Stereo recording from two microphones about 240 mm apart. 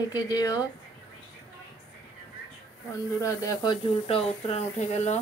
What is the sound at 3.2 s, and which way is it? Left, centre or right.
Speech, centre.